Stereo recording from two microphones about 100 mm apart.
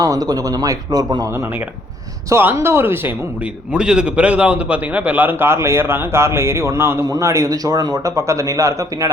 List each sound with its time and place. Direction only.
0.0 s a man's voice: 40° right (ahead or behind)
2.3 s a man's voice: 25° right (ahead or behind)
3.7 s a man's voice: 10° right (ahead or behind); by 9.0 s 35° right (ahead or behind)